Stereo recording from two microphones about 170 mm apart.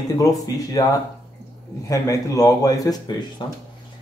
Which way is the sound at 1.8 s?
20° left (ahead or behind).